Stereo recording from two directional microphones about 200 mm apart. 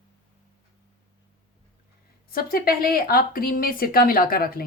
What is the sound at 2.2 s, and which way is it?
Speech, 45° left (ahead or behind).